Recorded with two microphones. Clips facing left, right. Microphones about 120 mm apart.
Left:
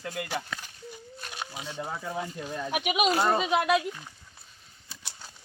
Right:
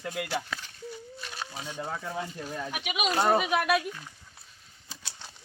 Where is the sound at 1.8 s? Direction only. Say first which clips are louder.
Left 1 dB; 5° left (ahead or behind).